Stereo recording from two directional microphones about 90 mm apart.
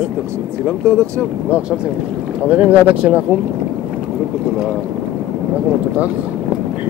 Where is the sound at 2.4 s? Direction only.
15° right (ahead or behind).